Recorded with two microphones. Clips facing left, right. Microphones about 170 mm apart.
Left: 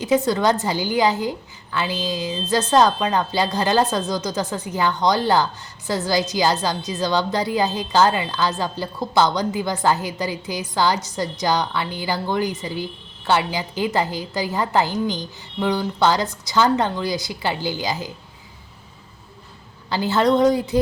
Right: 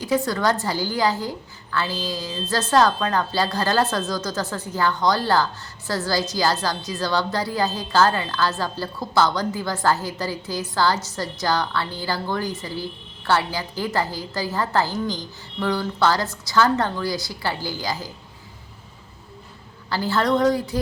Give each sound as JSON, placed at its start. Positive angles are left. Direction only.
{"t": 0.3, "sound": "a woman's voice", "side_deg": 20}
{"t": 19.9, "sound": "a woman's voice", "side_deg": 20}